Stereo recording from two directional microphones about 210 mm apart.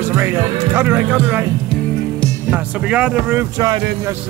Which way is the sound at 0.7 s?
10° right (ahead or behind).